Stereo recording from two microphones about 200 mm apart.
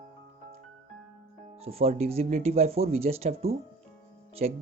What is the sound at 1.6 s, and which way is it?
Speech, 30° right (ahead or behind).